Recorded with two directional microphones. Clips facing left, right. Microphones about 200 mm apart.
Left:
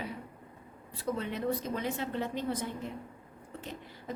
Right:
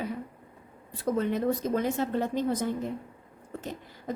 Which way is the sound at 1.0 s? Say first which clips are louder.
Right 6 dB; 45° right (ahead or behind).